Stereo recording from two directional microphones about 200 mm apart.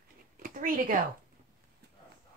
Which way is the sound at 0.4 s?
45° right (ahead or behind).